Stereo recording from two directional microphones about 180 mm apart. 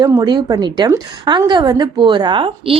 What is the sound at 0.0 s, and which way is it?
A woman's voice, 20° right (ahead or behind).